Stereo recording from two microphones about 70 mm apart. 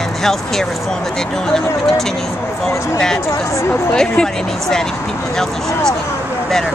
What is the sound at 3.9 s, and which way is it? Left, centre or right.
Speech, centre.